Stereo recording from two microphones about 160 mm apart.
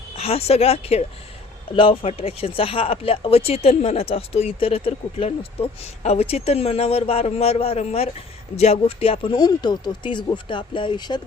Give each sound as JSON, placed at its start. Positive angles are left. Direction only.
{"t": 0.2, "sound": "speech", "side_deg": 40}